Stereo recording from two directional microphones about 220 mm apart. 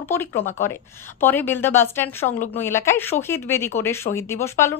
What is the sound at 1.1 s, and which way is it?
A woman's voice, 10° left (ahead or behind).